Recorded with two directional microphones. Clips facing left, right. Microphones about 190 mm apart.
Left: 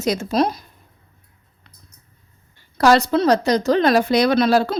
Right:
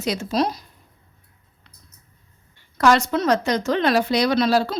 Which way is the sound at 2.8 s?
35° left (ahead or behind).